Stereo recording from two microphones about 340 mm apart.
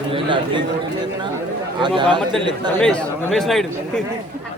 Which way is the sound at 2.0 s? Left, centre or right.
Centre.